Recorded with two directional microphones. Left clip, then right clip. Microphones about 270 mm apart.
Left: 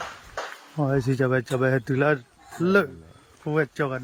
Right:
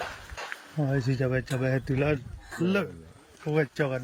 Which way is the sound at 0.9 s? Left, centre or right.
Centre.